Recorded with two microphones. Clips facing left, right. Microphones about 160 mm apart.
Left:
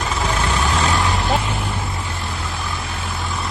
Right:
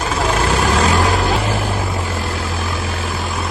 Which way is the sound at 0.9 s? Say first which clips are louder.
Right 3 dB; 75° right (ahead or behind).